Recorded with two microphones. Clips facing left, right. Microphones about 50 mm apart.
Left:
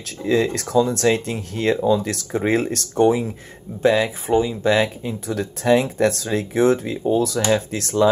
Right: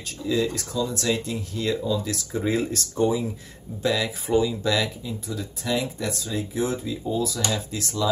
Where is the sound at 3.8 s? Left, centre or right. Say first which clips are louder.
Left 7 dB; left.